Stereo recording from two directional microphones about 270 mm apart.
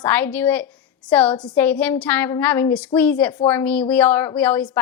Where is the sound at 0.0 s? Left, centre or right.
Centre.